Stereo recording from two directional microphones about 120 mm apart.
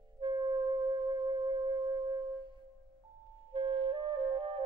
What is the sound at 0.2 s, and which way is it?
Music, 40° right (ahead or behind).